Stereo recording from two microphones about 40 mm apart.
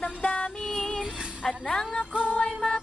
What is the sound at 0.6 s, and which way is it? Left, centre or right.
Female singing, centre.